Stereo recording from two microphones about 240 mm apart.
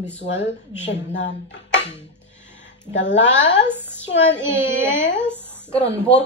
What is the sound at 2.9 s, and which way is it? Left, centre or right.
Speech, left.